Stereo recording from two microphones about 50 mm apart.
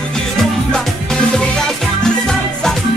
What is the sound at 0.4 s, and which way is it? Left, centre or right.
Music, centre.